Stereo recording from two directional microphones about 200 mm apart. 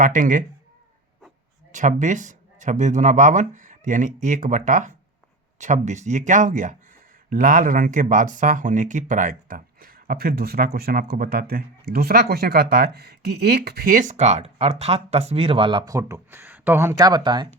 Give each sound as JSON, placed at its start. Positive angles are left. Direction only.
{"t": 0.0, "sound": "speech", "side_deg": -40}
{"t": 1.7, "sound": "speech", "side_deg": -40}